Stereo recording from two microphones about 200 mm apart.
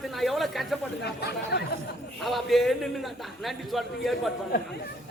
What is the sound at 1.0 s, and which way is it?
Speech, 55° left (ahead or behind).